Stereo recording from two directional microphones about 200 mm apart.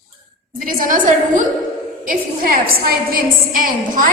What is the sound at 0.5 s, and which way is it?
A woman's voice, 45° right (ahead or behind).